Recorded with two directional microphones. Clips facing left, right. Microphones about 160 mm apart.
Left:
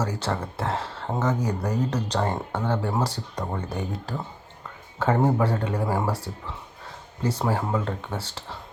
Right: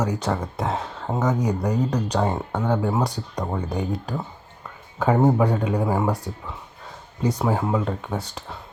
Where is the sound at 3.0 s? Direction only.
15° right (ahead or behind).